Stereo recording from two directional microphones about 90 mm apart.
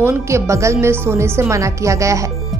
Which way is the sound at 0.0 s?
35° right (ahead or behind).